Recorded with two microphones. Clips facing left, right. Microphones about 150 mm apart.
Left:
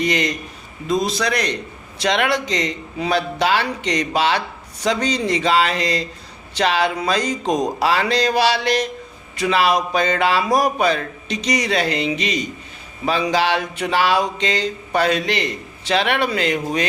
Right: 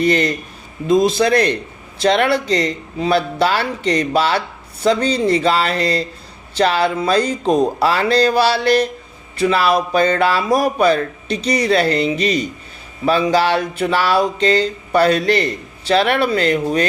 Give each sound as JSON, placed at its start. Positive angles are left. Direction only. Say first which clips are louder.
{"t": 0.0, "sound": "a man's voice", "louder": "right 5 dB", "side_deg": -35}